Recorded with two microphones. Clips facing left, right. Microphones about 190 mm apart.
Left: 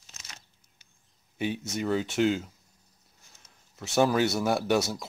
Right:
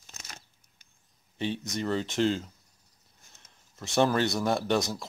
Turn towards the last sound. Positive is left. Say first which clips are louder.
# left 2 dB
turn(degrees=5)  # may be behind; listen again after turning